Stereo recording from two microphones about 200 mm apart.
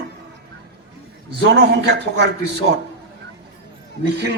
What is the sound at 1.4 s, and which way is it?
Speech, 55° right (ahead or behind).